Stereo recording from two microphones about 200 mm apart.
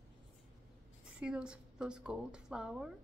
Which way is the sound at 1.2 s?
5° right (ahead or behind).